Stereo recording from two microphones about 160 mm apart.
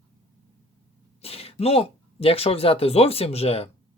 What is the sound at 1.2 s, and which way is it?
Speech, 40° left (ahead or behind).